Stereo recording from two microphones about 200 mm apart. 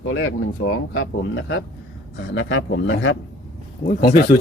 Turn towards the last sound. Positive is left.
turn(degrees=45)  # may be behind; listen again after turning